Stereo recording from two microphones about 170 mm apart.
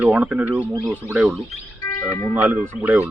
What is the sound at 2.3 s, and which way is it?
Speech, 10° right (ahead or behind).